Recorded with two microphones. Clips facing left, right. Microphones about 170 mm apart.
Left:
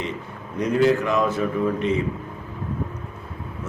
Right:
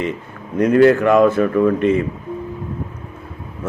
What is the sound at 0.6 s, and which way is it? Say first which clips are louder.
A man's voice: right 7 dB; 60° right (ahead or behind).